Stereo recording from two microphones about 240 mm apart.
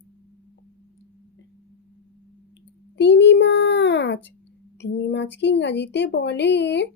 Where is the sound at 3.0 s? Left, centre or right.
Left.